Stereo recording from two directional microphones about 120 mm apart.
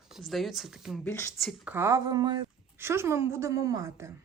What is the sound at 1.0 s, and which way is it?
Speech, 20° left (ahead or behind).